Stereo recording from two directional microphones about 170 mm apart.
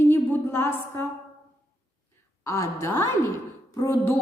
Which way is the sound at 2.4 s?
15° left (ahead or behind).